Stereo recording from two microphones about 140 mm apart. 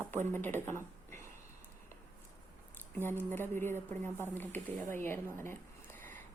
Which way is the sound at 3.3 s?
15° left (ahead or behind).